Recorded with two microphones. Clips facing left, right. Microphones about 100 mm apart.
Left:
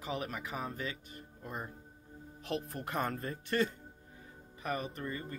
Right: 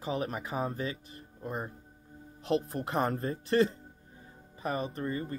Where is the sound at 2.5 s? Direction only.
30° right (ahead or behind).